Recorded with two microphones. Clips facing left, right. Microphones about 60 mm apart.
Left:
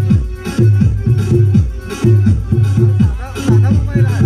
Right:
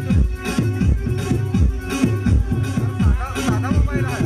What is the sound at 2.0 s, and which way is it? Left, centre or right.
Music, centre.